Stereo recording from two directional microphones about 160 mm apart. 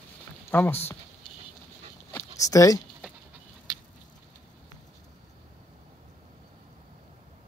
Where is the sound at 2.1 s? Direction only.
20° left (ahead or behind).